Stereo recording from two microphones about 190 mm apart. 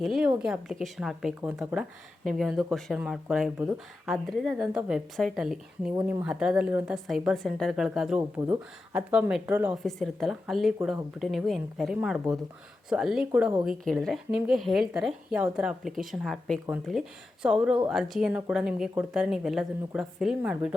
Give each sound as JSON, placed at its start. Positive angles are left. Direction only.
{"t": 0.0, "sound": "speech", "side_deg": 0}
{"t": 6.0, "sound": "speech", "side_deg": -15}
{"t": 6.2, "sound": "speech", "side_deg": -5}
{"t": 9.8, "sound": "speech", "side_deg": 0}